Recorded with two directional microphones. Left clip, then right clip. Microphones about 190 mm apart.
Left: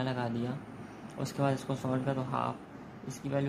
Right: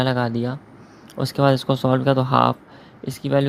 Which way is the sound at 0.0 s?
40° right (ahead or behind).